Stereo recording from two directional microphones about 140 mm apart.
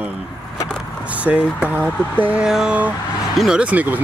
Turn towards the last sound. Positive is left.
turn(degrees=-10)  # may be behind; listen again after turning